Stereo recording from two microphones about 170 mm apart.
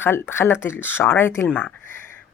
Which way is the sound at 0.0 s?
15° left (ahead or behind).